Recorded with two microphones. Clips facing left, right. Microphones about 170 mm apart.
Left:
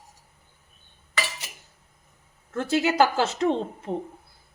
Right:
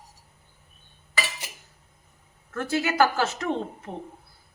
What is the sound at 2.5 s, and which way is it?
A woman's voice, 20° left (ahead or behind).